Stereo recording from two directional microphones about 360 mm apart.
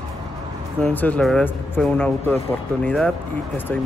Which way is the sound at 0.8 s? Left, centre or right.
Centre.